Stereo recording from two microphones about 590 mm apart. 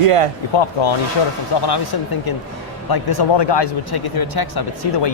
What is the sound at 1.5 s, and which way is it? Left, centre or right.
Speech, left.